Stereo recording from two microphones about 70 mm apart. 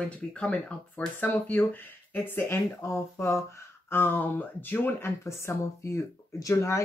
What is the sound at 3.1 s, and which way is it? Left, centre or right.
Speech, left.